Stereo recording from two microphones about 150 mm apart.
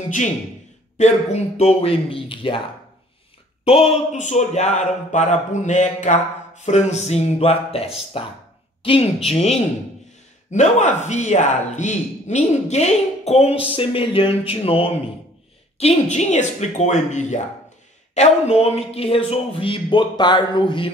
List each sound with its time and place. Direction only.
0.9 s speech: 50° left (ahead or behind)
3.6 s speech: 40° left (ahead or behind)
15.8 s speech: 50° left (ahead or behind); by 20.9 s 35° left (ahead or behind)